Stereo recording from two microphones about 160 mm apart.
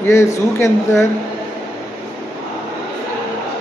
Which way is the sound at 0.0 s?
15° left (ahead or behind).